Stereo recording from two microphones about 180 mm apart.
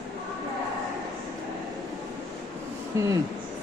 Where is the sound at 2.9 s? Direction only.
15° right (ahead or behind).